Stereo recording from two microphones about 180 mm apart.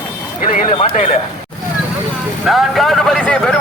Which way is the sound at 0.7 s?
35° left (ahead or behind).